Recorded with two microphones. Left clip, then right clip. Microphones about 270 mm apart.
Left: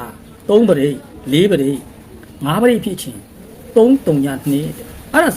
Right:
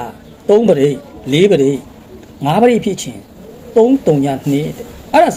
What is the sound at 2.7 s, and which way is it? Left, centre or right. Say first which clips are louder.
Speech: right 2 dB; centre.